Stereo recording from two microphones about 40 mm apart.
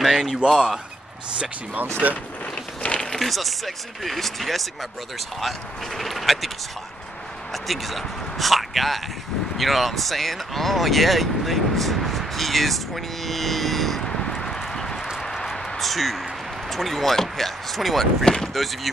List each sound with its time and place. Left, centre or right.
0.0 s speech: centre
1.8 s speech: right
2.5 s a sound: left
3.2 s speech: centre
5.9 s speech: centre
7.5 s speech: centre
14.0 s a sound: centre
14.7 s clip-clop: centre
15.8 s speech: centre
18.2 s speech: centre